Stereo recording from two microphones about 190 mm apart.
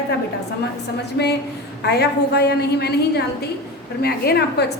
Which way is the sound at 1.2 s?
65° left (ahead or behind).